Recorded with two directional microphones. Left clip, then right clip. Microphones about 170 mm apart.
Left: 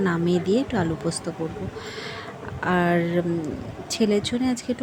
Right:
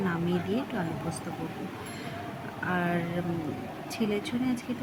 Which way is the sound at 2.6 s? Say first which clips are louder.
Left 8 dB; 35° left (ahead or behind).